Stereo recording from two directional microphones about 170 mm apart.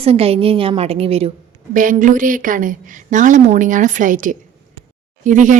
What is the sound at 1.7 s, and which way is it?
A woman's voice, 50° right (ahead or behind).